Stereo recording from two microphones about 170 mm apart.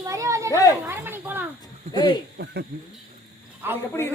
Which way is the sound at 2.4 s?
85° right.